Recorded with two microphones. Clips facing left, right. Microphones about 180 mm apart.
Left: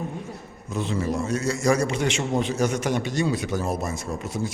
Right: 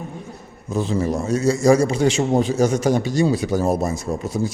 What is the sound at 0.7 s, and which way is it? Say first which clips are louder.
A man's voice: right 5 dB; 35° right (ahead or behind).